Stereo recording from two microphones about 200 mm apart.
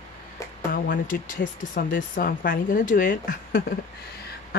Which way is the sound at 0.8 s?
45° left (ahead or behind).